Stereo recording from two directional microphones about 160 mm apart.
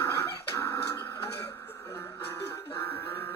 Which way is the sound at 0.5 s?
20° left (ahead or behind).